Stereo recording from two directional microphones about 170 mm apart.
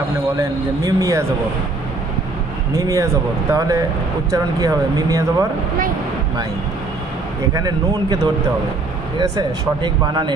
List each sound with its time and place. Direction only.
0.4 s speech: 20° right (ahead or behind)
2.7 s speech: 20° right (ahead or behind)
7.5 s speech: 20° right (ahead or behind)